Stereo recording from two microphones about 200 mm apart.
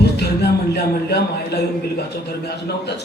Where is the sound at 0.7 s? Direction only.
55° left (ahead or behind).